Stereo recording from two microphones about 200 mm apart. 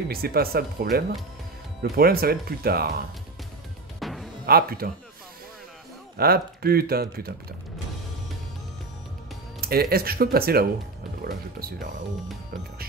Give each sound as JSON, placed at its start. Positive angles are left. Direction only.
{"t": 0.1, "sound": "speech", "side_deg": -50}
{"t": 4.0, "sound": "music", "side_deg": 0}
{"t": 4.5, "sound": "speech", "side_deg": -50}
{"t": 6.1, "sound": "speech", "side_deg": -50}
{"t": 9.6, "sound": "speech", "side_deg": -50}